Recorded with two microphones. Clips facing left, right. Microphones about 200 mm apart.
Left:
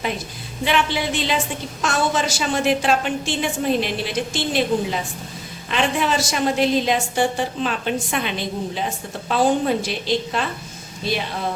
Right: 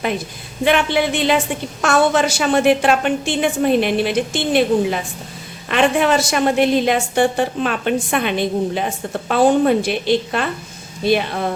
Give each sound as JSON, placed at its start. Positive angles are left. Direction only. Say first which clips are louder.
{"t": 0.6, "sound": "a woman's voice", "louder": "right 5 dB", "side_deg": -55}